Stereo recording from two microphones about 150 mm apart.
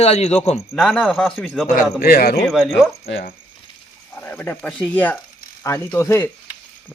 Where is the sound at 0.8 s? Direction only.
Centre (ahead or behind).